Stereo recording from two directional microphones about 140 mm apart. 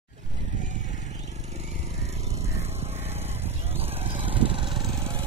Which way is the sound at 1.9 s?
50° right (ahead or behind).